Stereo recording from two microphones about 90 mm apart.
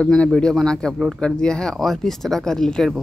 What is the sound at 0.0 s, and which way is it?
Speech, 5° left (ahead or behind).